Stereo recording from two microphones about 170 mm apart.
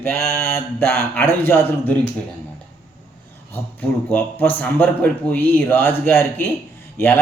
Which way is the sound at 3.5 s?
10° left (ahead or behind).